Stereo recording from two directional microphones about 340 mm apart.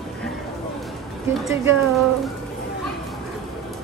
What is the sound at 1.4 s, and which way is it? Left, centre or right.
Speech, centre.